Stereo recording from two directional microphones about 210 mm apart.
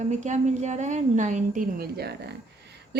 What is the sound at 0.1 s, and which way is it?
A woman's voice, 35° right (ahead or behind).